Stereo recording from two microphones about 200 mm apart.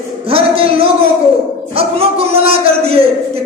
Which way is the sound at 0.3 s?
30° right (ahead or behind).